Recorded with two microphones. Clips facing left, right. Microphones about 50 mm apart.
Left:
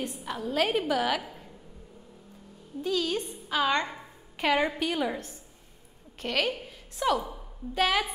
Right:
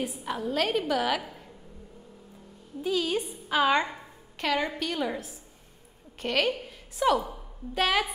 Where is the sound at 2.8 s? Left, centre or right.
Centre.